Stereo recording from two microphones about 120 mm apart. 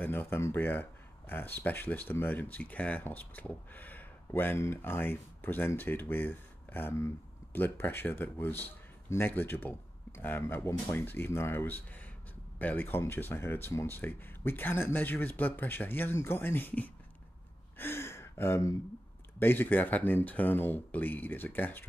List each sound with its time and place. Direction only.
0.0 s speech: 15° left (ahead or behind)
17.7 s gasp: 20° left (ahead or behind)
19.4 s speech: 15° left (ahead or behind)